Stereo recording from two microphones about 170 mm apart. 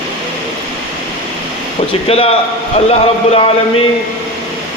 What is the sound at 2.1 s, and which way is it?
Speech, 35° left (ahead or behind).